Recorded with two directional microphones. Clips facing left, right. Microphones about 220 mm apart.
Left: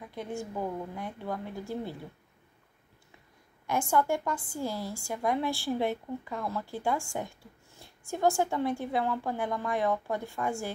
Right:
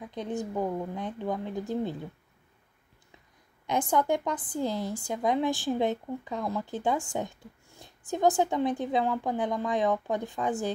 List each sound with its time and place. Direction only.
0.1 s a woman's voice: 20° right (ahead or behind)
3.6 s a woman's voice: 20° right (ahead or behind)